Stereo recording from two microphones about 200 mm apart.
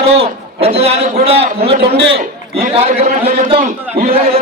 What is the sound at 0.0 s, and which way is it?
A man's voice, 30° right (ahead or behind).